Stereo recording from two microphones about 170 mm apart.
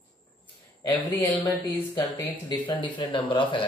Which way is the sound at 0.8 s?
20° left (ahead or behind).